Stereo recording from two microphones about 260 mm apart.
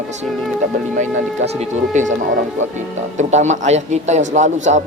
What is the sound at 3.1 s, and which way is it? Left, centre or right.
A man's voice, right.